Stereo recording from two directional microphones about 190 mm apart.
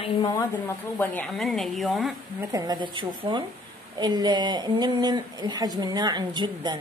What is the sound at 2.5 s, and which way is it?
A woman's voice, 20° right (ahead or behind).